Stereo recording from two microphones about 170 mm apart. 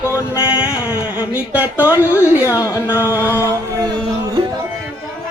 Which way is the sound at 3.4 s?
20° right (ahead or behind).